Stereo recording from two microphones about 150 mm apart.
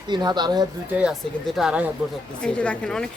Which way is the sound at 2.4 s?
10° left (ahead or behind).